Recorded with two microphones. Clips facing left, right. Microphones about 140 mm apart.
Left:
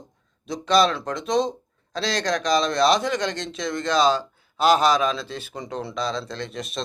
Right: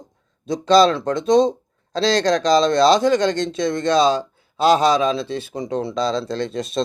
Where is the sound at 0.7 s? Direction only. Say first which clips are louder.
Right 6 dB; 30° right (ahead or behind).